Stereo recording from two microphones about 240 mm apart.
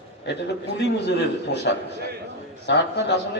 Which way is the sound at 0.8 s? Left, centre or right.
Left.